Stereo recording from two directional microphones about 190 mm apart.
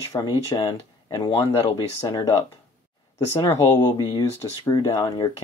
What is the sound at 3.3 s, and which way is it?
Speech, 25° left (ahead or behind).